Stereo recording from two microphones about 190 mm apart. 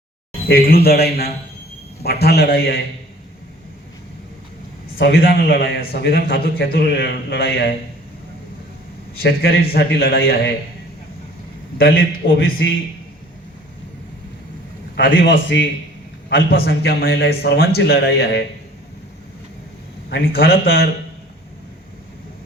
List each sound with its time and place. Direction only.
0.4 s a man's voice: 50° left (ahead or behind)
4.9 s a man's voice: 55° left (ahead or behind)
9.1 s a man's voice: 55° left (ahead or behind)
11.8 s a man's voice: 50° left (ahead or behind)
12.2 s a man's voice: 90° left
14.9 s a man's voice: 75° left (ahead or behind)
16.5 s a man's voice: 55° left (ahead or behind)
20.1 s a man's voice: 60° left (ahead or behind)